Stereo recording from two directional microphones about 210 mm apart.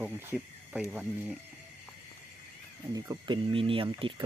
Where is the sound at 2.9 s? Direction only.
20° right (ahead or behind).